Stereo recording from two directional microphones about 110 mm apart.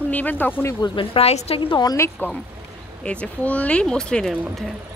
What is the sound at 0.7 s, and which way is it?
Speech, 40° left (ahead or behind).